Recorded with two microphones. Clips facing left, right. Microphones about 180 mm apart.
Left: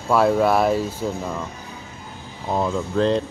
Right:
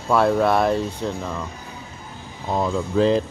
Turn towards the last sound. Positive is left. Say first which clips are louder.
# right 2 dB
turn(degrees=-5)  # may be behind; listen again after turning